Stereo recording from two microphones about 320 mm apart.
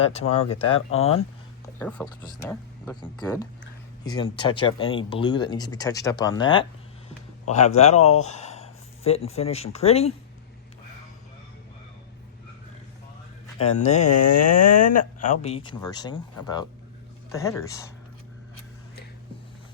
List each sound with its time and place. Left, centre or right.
0.0 s speech: centre
1.8 s speech: centre
13.6 s speech: left
14.3 s speech: left
14.8 s speech: left